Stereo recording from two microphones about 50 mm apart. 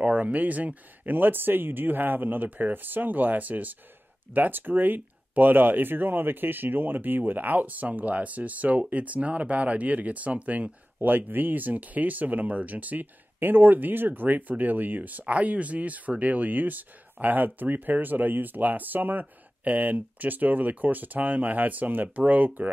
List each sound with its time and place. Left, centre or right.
0.0 s speech: right
11.0 s speech: right